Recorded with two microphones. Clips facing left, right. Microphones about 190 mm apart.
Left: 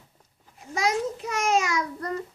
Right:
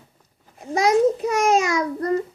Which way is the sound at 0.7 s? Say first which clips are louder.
Right 9 dB; 40° right (ahead or behind).